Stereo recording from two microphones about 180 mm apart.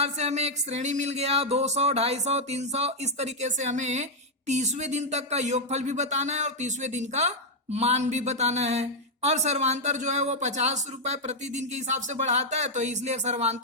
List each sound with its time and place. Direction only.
0.0 s speech: 40° right (ahead or behind)